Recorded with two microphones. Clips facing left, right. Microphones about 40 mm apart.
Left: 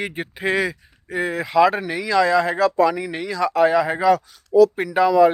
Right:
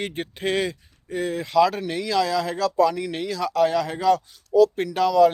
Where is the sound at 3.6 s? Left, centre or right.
Left.